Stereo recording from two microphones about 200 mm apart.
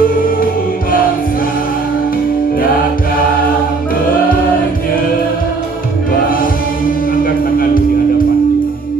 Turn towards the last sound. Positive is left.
turn(degrees=45)  # may be behind; listen again after turning